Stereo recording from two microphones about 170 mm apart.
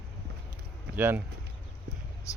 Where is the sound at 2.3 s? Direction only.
20° left (ahead or behind).